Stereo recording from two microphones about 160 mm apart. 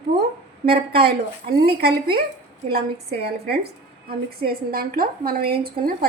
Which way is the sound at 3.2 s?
80° right.